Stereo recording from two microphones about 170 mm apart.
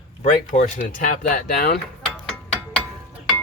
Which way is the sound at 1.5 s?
65° left (ahead or behind).